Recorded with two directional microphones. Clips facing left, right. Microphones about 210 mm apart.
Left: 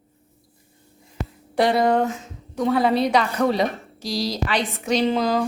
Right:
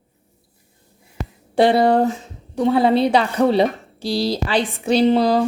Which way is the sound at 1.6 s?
30° right (ahead or behind).